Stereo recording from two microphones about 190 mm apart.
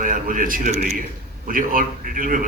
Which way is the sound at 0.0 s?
45° right (ahead or behind).